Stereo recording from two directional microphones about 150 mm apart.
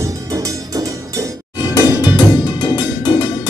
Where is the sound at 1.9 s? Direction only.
30° left (ahead or behind).